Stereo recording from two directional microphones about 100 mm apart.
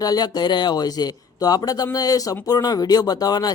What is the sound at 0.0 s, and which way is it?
Speech, 40° left (ahead or behind).